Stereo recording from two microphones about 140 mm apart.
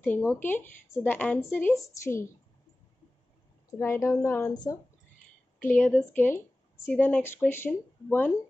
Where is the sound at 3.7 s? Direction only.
20° left (ahead or behind).